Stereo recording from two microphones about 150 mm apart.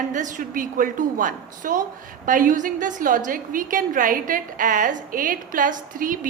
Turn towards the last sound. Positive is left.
turn(degrees=-65)  # may be behind; listen again after turning